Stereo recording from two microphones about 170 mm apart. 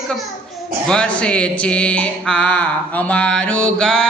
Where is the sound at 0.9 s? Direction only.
5° left (ahead or behind).